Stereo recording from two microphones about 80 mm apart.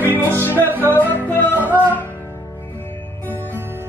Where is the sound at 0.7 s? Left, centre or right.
Right.